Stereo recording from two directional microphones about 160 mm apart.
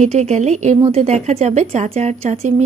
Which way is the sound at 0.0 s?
45° right (ahead or behind).